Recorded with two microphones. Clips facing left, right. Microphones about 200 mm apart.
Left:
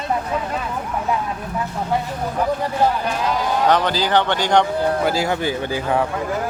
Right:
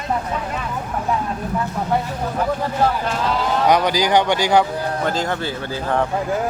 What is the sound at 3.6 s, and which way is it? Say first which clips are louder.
A man's voice: right 2 dB; 10° right (ahead or behind).